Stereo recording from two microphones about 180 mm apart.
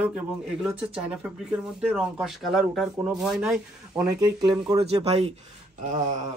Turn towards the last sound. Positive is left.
turn(degrees=-45)  # may be behind; listen again after turning